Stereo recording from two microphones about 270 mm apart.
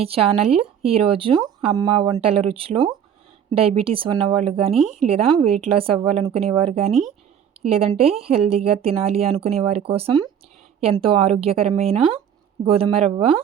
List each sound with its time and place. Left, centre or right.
0.0 s speech: right
4.7 s speech: centre
4.9 s speech: right